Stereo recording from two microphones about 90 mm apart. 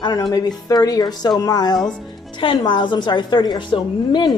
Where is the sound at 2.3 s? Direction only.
70° left (ahead or behind).